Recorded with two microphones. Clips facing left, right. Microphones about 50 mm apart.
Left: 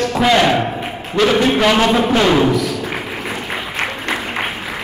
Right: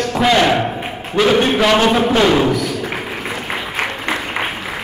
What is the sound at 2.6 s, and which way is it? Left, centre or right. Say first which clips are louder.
Thump: left 1 dB; right.